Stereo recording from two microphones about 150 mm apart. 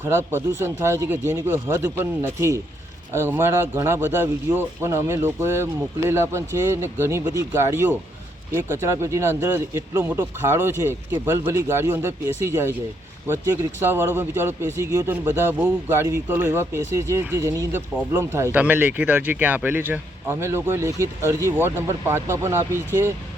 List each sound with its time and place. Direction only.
0.0 s speech: 15° right (ahead or behind)